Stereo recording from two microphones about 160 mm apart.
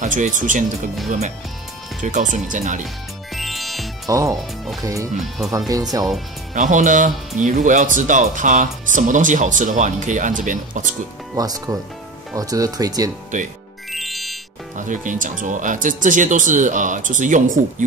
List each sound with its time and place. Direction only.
0.0 s speech: 50° right (ahead or behind)
2.0 s speech: 50° right (ahead or behind)
3.3 s music: centre (ahead or behind)
4.1 s speech: 20° right (ahead or behind)
6.5 s speech: 55° right (ahead or behind)
11.3 s speech: 25° right (ahead or behind)
13.9 s music: centre (ahead or behind)
14.8 s speech: 55° right (ahead or behind)